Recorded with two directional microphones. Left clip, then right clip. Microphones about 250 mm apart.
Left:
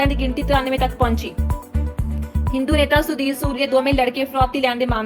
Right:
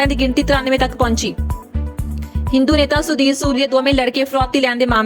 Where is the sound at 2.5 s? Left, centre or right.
Right.